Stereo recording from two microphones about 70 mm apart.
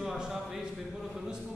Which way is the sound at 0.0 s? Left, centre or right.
Centre.